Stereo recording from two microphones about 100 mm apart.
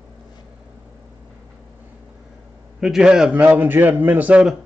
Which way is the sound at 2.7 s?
5° right (ahead or behind).